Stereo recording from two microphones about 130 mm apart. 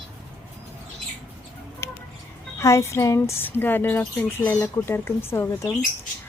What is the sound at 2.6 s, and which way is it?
A woman's voice, 20° left (ahead or behind).